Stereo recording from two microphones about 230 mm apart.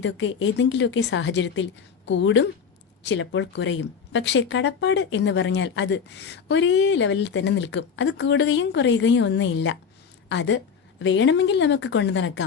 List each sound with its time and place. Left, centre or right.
0.0 s speech: left